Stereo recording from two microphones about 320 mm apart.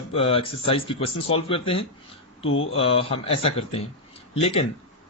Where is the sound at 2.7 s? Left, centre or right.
Centre.